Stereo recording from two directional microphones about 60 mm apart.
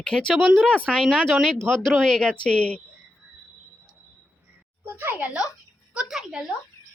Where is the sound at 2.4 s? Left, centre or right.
Centre.